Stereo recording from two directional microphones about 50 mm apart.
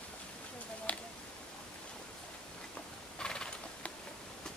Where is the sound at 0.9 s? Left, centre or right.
Left.